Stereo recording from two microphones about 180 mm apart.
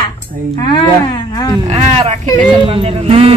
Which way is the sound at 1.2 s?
25° left (ahead or behind).